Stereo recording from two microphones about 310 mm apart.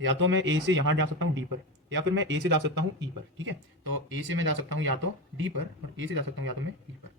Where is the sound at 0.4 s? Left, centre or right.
Right.